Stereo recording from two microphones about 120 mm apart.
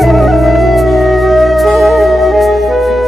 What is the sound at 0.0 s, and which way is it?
Music, centre (ahead or behind).